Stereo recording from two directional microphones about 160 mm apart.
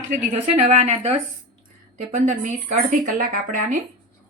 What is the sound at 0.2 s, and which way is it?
Speech, 50° right (ahead or behind).